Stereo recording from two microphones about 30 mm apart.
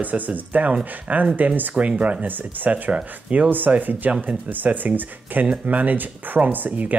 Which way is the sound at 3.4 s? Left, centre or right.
Right.